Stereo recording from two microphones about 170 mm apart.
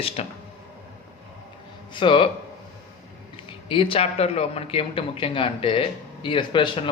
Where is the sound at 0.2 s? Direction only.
35° left (ahead or behind).